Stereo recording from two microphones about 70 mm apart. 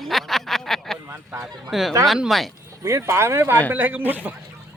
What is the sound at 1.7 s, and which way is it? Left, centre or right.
Speech, centre.